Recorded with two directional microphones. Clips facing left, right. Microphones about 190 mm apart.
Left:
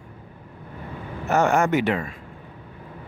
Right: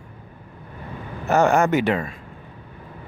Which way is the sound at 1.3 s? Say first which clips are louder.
Right 2 dB; 35° right (ahead or behind).